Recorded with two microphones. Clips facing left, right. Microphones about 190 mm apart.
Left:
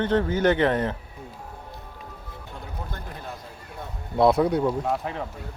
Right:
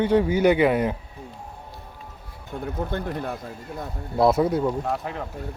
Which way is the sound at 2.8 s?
60° right (ahead or behind).